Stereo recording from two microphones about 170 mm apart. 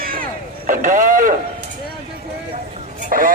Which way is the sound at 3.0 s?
55° right (ahead or behind).